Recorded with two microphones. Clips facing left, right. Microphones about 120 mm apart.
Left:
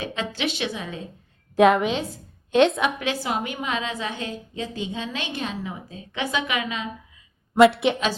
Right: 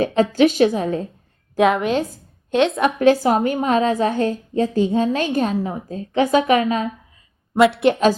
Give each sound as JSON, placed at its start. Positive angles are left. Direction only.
{"t": 0.0, "sound": "a woman's voice", "side_deg": -45}
{"t": 1.5, "sound": "a woman's voice", "side_deg": 0}
{"t": 2.8, "sound": "a woman's voice", "side_deg": -45}
{"t": 7.6, "sound": "a woman's voice", "side_deg": 0}